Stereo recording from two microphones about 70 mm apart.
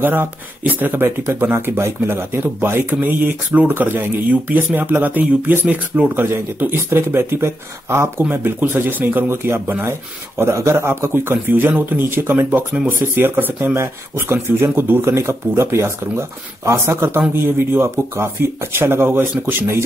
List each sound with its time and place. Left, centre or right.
0.0 s speech: right
8.3 s speech: right